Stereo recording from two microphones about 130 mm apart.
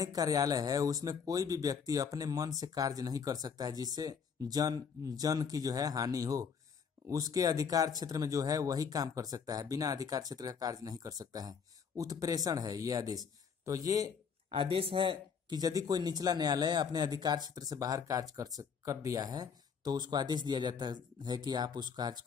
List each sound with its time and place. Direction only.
0.0 s speech: 30° right (ahead or behind)
14.5 s speech: 45° right (ahead or behind)